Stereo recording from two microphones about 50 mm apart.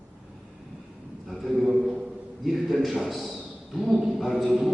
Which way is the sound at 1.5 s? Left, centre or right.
Centre.